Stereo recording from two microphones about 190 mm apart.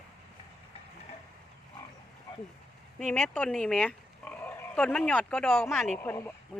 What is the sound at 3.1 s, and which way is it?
Speech, 10° left (ahead or behind).